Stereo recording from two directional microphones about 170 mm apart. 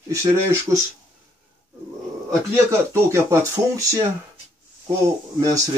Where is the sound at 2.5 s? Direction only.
15° right (ahead or behind).